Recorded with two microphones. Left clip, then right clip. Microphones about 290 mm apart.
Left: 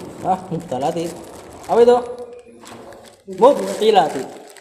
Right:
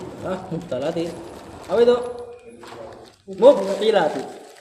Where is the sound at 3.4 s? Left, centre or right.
Centre.